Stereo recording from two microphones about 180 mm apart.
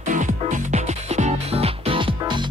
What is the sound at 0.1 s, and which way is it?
Music, 40° right (ahead or behind).